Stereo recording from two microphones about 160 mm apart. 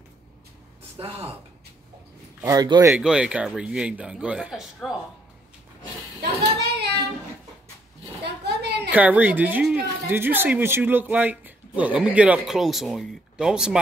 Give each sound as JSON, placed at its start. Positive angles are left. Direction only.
{"t": 0.9, "sound": "speech", "side_deg": -35}
{"t": 2.4, "sound": "speech", "side_deg": -25}
{"t": 3.0, "sound": "a man's voice", "side_deg": -5}
{"t": 6.6, "sound": "child singing", "side_deg": -90}
{"t": 8.5, "sound": "a sound", "side_deg": -90}
{"t": 8.9, "sound": "speech", "side_deg": -10}